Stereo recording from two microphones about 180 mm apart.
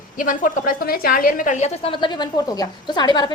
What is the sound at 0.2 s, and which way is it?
A woman's voice, 50° left (ahead or behind).